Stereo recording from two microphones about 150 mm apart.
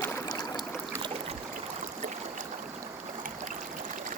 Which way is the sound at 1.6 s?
55° right (ahead or behind).